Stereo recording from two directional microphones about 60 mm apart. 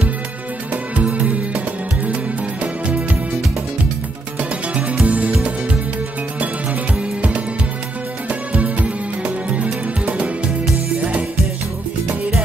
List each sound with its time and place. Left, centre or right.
0.9 s music: right
2.6 s music: right
4.4 s music: right
7.2 s music: right